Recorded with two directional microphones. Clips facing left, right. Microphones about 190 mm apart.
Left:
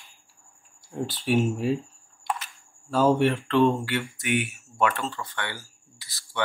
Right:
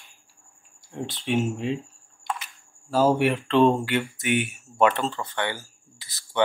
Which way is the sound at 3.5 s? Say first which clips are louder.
Right 5 dB; 20° right (ahead or behind).